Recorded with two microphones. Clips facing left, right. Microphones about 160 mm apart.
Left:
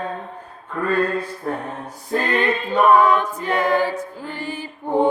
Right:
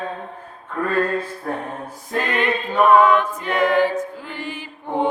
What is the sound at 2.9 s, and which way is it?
Choir, 35° left (ahead or behind).